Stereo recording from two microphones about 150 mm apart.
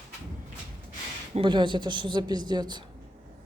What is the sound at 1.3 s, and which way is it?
Speech, 30° right (ahead or behind).